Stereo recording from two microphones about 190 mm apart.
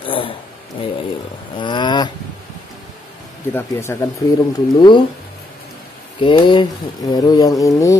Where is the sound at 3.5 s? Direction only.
15° left (ahead or behind).